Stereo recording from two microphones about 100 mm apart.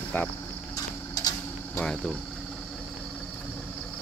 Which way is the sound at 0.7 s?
40° left (ahead or behind).